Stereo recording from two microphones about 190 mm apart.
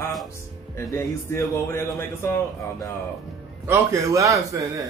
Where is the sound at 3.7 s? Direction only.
15° right (ahead or behind).